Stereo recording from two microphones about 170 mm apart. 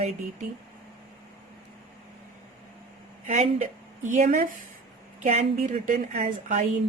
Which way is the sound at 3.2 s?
45° right (ahead or behind).